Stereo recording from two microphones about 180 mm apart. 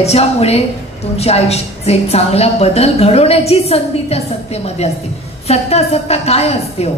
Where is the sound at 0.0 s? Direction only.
35° left (ahead or behind).